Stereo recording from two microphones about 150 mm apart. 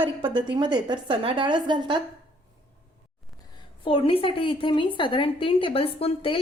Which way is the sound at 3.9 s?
40° left (ahead or behind).